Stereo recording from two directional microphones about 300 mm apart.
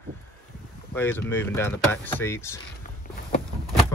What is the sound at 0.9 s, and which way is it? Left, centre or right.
Speech, centre.